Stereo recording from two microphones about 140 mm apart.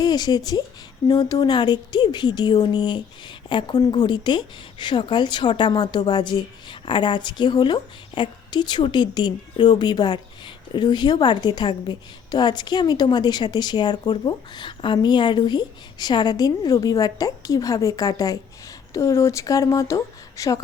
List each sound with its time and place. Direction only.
0.0 s speech: 30° left (ahead or behind)